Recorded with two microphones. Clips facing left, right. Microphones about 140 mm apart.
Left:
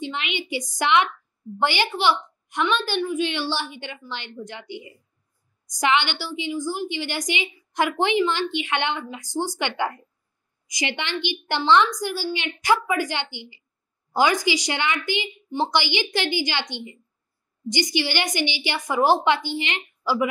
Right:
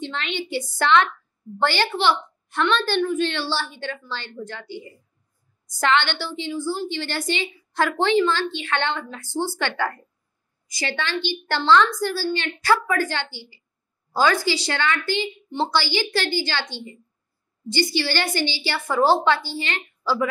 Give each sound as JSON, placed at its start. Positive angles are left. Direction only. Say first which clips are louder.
{"t": 0.0, "sound": "a woman's voice", "louder": "right 1 dB", "side_deg": 15}